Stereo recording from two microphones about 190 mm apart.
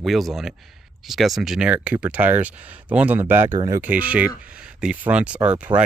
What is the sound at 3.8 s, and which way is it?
Speech, 5° right (ahead or behind).